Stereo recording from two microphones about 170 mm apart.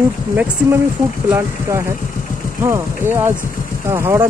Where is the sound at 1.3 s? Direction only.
15° right (ahead or behind).